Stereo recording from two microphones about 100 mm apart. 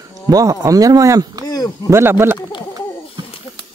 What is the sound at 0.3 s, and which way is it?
Speech, 35° right (ahead or behind).